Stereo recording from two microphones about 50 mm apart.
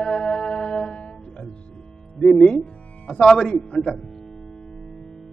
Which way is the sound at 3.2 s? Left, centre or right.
Centre.